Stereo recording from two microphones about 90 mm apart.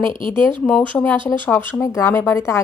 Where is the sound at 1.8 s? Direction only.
35° left (ahead or behind).